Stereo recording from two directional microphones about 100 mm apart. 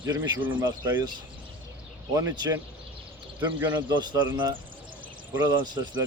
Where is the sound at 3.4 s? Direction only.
45° right (ahead or behind).